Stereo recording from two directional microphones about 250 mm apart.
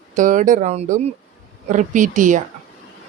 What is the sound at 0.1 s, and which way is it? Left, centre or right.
Speech, right.